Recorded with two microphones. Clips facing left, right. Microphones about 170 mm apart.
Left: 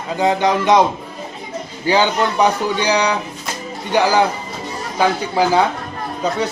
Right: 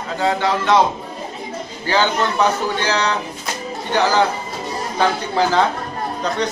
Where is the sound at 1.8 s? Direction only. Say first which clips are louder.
Left 2 dB; 15° left (ahead or behind).